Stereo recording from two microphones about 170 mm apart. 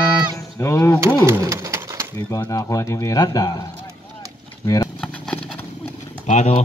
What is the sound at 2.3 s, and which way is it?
Speech, 20° left (ahead or behind).